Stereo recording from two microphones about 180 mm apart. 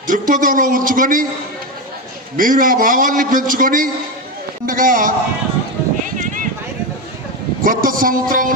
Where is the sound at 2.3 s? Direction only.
50° right (ahead or behind).